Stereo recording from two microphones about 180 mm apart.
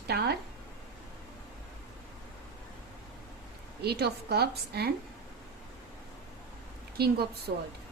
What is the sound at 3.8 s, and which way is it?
A woman's voice, 65° right (ahead or behind).